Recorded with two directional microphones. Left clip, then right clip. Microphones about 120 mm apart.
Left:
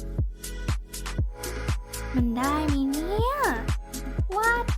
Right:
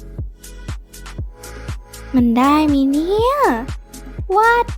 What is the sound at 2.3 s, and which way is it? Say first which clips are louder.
A child's voice: right 12 dB; 50° right (ahead or behind).